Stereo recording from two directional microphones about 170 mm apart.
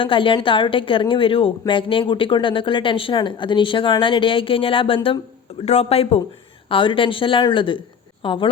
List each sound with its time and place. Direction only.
0.0 s a woman's voice: 30° left (ahead or behind)
5.6 s a woman's voice: 40° left (ahead or behind)